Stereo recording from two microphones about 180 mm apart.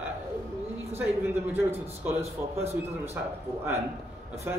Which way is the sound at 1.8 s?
35° right (ahead or behind).